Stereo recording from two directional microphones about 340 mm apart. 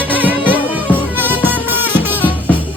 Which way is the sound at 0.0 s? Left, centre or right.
Centre.